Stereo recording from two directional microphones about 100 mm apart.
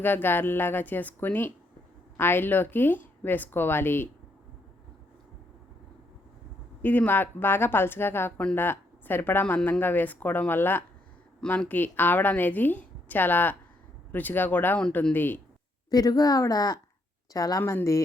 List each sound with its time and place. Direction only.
0.0 s a woman's voice: 20° left (ahead or behind)
6.8 s a woman's voice: 15° left (ahead or behind)
15.9 s speech: 40° left (ahead or behind)